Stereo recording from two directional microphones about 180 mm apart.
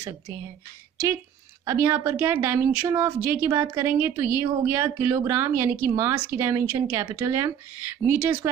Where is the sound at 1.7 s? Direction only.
15° right (ahead or behind).